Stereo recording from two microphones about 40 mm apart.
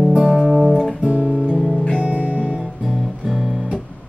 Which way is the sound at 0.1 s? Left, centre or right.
Centre.